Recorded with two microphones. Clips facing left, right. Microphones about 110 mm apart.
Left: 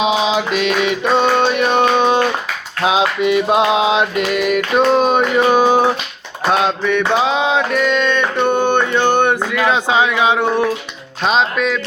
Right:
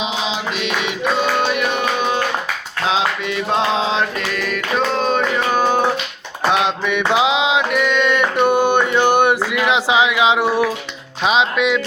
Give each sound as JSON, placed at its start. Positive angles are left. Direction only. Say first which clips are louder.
{"t": 0.0, "sound": "mantra", "louder": "left 7 dB", "side_deg": 60}
{"t": 1.5, "sound": "music", "louder": "left 6 dB", "side_deg": 30}
{"t": 2.8, "sound": "mantra", "louder": "left 5 dB", "side_deg": 15}